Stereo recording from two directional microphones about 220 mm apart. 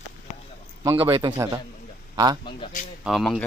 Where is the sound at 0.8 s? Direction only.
20° right (ahead or behind).